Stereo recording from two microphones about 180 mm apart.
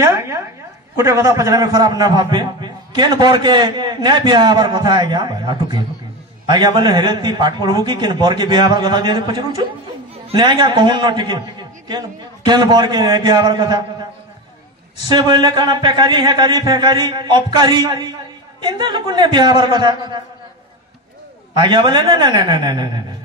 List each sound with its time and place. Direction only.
0.0 s a sound: 15° right (ahead or behind)
0.9 s a man's voice: 15° right (ahead or behind)
15.0 s a man's voice: 25° right (ahead or behind)
21.5 s a man's voice: 25° right (ahead or behind)